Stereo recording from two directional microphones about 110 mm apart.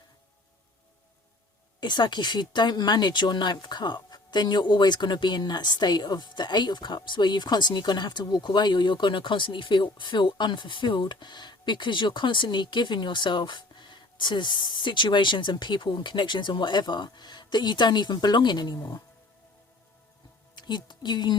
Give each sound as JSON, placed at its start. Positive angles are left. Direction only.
{"t": 1.8, "sound": "speech", "side_deg": 45}
{"t": 20.6, "sound": "speech", "side_deg": 40}